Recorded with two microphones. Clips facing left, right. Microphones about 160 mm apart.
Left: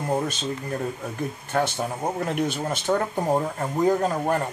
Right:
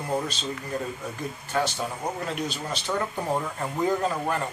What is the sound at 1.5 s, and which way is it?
A man's voice, 55° left (ahead or behind).